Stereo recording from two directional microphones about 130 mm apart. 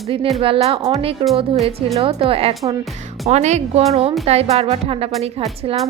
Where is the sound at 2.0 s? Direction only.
50° right (ahead or behind).